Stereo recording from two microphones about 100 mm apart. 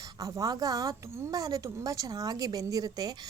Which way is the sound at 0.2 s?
35° right (ahead or behind).